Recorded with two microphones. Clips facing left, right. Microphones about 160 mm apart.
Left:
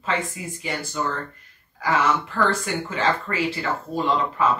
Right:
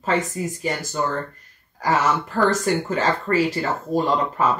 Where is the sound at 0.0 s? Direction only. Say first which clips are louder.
Right 4 dB; 40° right (ahead or behind).